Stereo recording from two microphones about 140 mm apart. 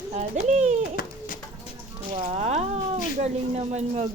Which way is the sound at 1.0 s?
90° left.